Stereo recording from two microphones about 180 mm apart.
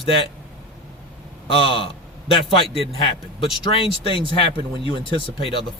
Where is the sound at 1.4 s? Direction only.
30° left (ahead or behind).